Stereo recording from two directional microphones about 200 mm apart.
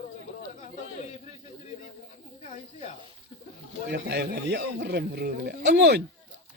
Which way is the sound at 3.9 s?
60° right (ahead or behind).